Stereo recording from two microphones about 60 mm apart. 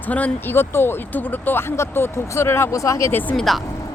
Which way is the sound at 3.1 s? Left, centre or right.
Left.